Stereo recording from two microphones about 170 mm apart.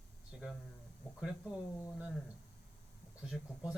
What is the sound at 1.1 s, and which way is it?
Speech, 5° right (ahead or behind).